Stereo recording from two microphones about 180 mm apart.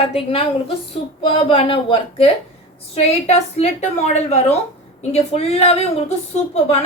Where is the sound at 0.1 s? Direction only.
30° left (ahead or behind).